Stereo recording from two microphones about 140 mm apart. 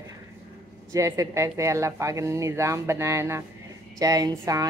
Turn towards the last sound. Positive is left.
turn(degrees=-25)  # may be behind; listen again after turning